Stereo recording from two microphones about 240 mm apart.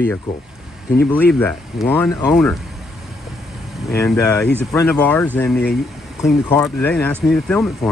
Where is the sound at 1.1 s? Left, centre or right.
Centre.